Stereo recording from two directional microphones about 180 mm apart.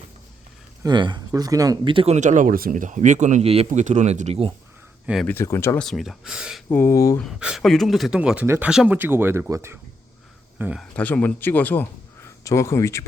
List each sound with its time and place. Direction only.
0.8 s speech: 25° right (ahead or behind)
5.2 s speech: 10° left (ahead or behind)
5.8 s speech: centre (ahead or behind)
6.7 s speech: 15° left (ahead or behind)
7.2 s speech: centre (ahead or behind)
10.9 s speech: 10° left (ahead or behind)